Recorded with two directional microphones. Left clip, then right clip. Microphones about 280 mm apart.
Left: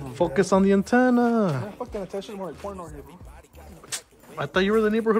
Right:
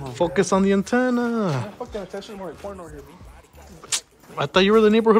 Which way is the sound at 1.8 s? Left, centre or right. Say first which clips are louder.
Even; left.